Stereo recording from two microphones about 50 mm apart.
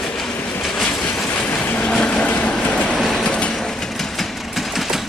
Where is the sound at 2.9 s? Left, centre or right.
Centre.